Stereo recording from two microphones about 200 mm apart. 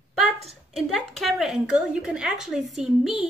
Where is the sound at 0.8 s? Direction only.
Centre (ahead or behind).